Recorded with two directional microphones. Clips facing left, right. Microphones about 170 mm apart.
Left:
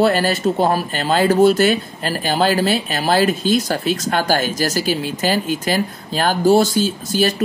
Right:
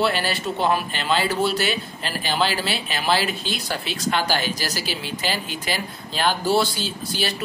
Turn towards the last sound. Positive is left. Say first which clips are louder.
# left 9 dB
turn(degrees=45)  # may be behind; listen again after turning